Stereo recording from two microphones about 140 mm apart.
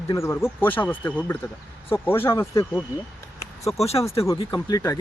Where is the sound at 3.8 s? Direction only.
45° left (ahead or behind).